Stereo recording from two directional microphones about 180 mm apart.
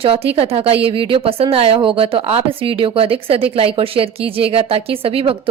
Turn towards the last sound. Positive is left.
turn(degrees=-30)  # may be behind; listen again after turning